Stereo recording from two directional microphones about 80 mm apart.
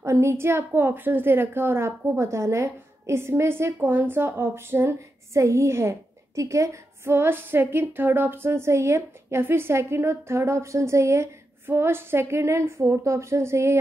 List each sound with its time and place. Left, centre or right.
0.0 s a woman's voice: right